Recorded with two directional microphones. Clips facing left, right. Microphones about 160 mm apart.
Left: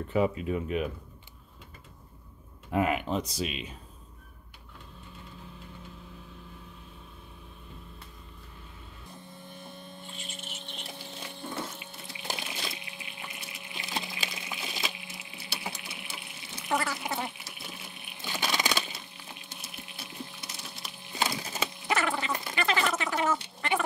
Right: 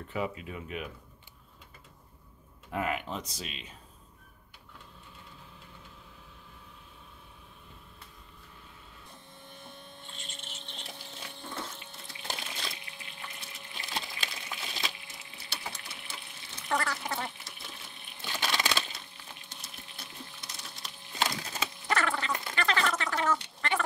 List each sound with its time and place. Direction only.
0.1 s speech: 35° left (ahead or behind)
2.7 s speech: 20° left (ahead or behind)
9.6 s a sound: 5° left (ahead or behind)
15.0 s water: 10° left (ahead or behind)
19.1 s splinter: 10° left (ahead or behind)
21.4 s bird: 5° left (ahead or behind)
22.5 s a sound: 10° left (ahead or behind)